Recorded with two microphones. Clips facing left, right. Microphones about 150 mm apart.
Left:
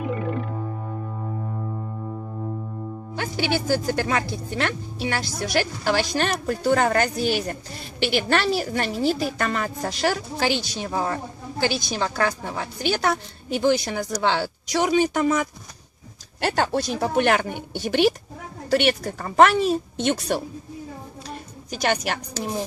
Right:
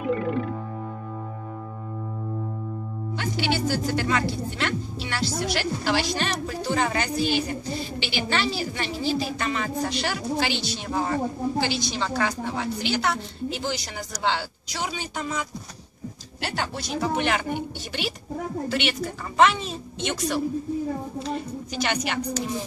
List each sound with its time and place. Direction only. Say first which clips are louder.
3.2 s speech: left 1 dB; 45° left (ahead or behind)
16.4 s speech: left 8 dB; 50° left (ahead or behind)
18.7 s speech: left 10 dB; 45° left (ahead or behind)
21.8 s speech: left 4 dB; 45° left (ahead or behind)